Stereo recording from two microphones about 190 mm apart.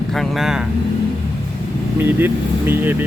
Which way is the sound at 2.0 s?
10° right (ahead or behind).